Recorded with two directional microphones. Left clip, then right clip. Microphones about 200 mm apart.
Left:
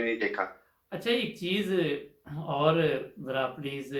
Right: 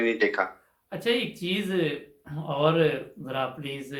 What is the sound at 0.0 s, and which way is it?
Speech, 45° right (ahead or behind).